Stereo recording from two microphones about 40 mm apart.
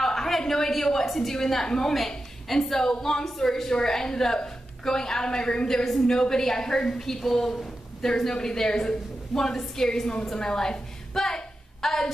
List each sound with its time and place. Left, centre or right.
0.0 s a woman's voice: centre
7.5 s a sound: left
8.2 s a woman's voice: centre